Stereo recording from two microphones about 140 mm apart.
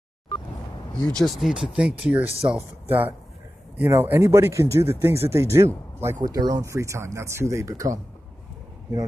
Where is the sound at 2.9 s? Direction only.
15° right (ahead or behind).